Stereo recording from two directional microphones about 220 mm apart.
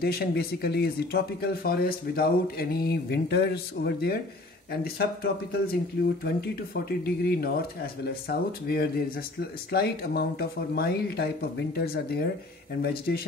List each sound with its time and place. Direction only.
0.0 s speech: 45° left (ahead or behind)